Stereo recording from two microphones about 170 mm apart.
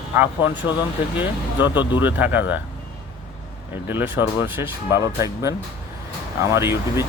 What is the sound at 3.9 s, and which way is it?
Speech, 10° right (ahead or behind).